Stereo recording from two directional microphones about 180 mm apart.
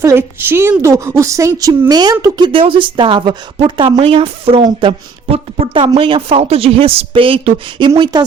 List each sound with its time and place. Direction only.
0.0 s a woman's voice: 15° right (ahead or behind)